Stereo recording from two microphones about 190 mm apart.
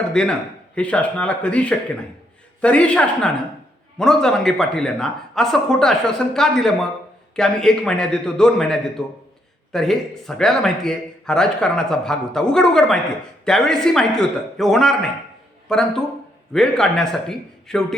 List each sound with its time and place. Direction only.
0.1 s speech: 5° left (ahead or behind)